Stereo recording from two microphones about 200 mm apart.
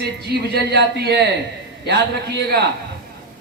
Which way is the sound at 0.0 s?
55° right (ahead or behind).